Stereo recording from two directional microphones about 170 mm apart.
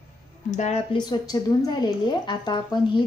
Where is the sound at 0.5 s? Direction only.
45° left (ahead or behind).